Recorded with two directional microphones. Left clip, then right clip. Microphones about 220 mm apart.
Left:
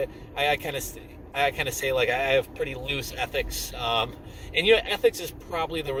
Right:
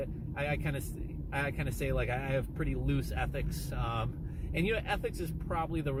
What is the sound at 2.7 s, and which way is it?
Speech, 5° left (ahead or behind).